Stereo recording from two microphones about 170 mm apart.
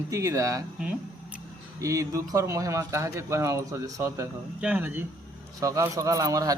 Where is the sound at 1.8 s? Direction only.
20° right (ahead or behind).